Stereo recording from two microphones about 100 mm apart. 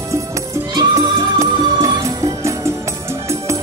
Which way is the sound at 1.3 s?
30° right (ahead or behind).